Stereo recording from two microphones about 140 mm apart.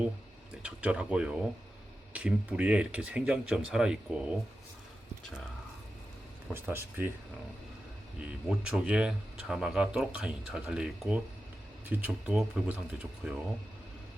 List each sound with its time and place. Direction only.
0.6 s speech: 10° right (ahead or behind)
6.5 s speech: 15° right (ahead or behind)
8.2 s speech: 5° right (ahead or behind)